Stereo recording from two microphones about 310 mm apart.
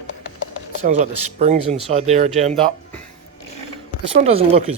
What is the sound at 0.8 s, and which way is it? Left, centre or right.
Speech, right.